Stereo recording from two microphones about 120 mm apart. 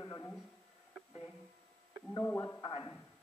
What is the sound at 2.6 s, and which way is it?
Speech, 40° left (ahead or behind).